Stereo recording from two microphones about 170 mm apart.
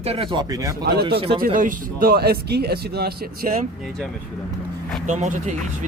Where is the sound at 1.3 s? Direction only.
55° right (ahead or behind).